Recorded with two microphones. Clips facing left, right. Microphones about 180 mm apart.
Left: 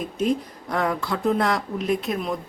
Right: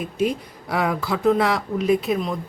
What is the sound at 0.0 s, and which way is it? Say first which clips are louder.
Speech: even; 5° right (ahead or behind).